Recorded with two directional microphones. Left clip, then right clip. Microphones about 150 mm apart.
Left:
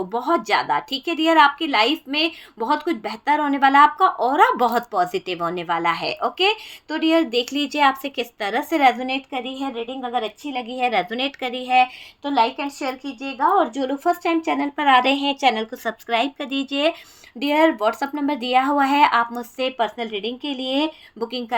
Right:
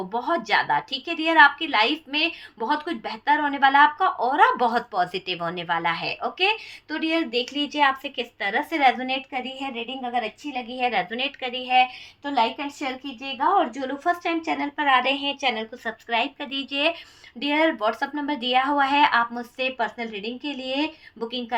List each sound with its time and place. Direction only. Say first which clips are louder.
0.1 s a woman's voice: left 2 dB; 55° left (ahead or behind)
12.2 s speech: left 4 dB; 40° left (ahead or behind)
14.8 s a woman's voice: left 5 dB; 80° left; by 21.4 s 50° left (ahead or behind)